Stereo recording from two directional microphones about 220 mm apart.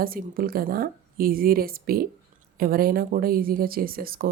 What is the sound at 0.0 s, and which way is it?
A woman's voice, 40° right (ahead or behind).